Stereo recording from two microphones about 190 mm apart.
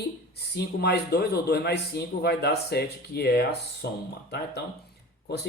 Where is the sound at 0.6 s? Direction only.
60° left (ahead or behind).